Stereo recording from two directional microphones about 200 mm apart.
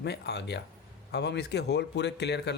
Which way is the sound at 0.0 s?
55° left (ahead or behind).